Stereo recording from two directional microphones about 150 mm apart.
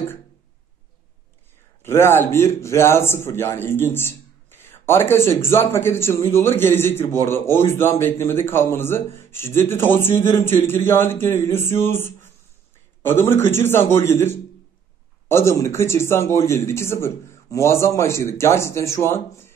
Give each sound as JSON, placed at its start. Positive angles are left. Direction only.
{"t": 1.8, "sound": "a man's voice", "side_deg": 15}